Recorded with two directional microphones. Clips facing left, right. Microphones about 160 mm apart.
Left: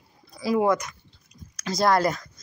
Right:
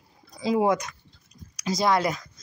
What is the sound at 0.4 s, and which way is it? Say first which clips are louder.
Speech: even; 20° right (ahead or behind).